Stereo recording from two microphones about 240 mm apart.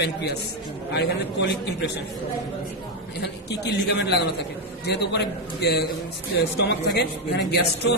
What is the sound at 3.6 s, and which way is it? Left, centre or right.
A man's voice, left.